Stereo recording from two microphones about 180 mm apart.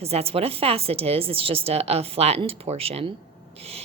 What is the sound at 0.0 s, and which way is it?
A woman's voice, 35° right (ahead or behind).